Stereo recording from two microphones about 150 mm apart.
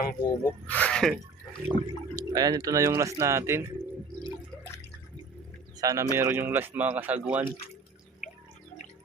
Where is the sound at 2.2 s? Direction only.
25° right (ahead or behind).